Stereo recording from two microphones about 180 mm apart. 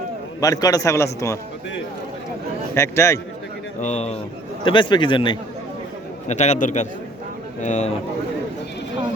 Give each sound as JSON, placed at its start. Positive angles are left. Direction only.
{"t": 0.3, "sound": "a man's voice", "side_deg": 20}
{"t": 2.7, "sound": "a man's voice", "side_deg": 15}
{"t": 3.8, "sound": "a man's voice", "side_deg": 40}
{"t": 4.6, "sound": "a man's voice", "side_deg": 25}
{"t": 6.2, "sound": "a man's voice", "side_deg": 40}